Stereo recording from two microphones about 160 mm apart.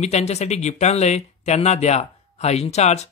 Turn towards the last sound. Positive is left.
turn(degrees=45)  # may be behind; listen again after turning